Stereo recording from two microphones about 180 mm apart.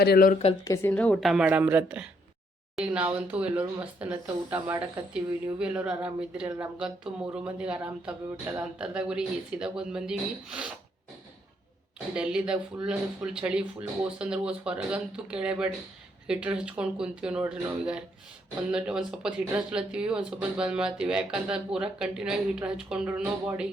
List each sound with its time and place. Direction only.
0.0 s speech: 60° left (ahead or behind)
0.6 s speech: 15° left (ahead or behind); by 10.7 s 5° right (ahead or behind)
12.1 s speech: 5° right (ahead or behind)